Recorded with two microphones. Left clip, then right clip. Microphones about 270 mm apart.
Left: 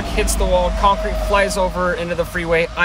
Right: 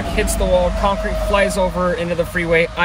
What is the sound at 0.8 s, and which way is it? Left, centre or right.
Speech, centre.